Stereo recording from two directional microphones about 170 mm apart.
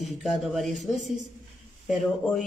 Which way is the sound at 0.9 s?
45° right (ahead or behind).